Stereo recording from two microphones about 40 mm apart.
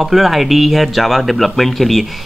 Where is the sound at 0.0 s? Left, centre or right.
Centre.